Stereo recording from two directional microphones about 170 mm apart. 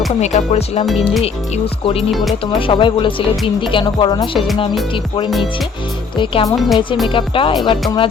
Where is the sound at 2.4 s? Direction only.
30° left (ahead or behind).